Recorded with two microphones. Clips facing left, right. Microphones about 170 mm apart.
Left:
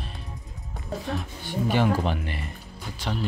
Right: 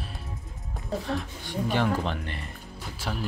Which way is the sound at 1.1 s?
5° left (ahead or behind).